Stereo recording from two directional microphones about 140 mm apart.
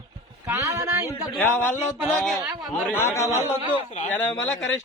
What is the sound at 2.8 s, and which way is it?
Speech, 15° left (ahead or behind).